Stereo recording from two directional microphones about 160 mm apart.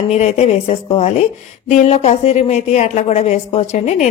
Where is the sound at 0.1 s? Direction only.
45° left (ahead or behind).